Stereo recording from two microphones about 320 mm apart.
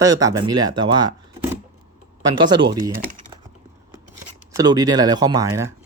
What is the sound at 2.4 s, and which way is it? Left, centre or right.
Speech, centre.